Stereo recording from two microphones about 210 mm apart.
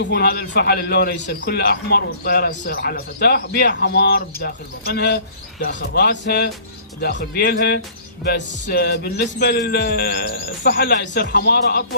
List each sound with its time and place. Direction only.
0.0 s a man's voice: 50° left (ahead or behind)